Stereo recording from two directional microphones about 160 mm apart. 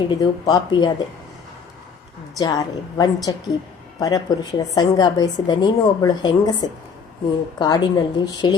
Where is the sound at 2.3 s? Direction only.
25° left (ahead or behind).